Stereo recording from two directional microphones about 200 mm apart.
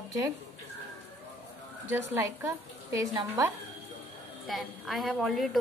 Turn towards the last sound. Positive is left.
turn(degrees=0)  # may be behind; listen again after turning